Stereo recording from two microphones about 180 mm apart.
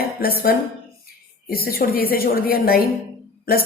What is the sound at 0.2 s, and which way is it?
A woman's voice, 55° left (ahead or behind).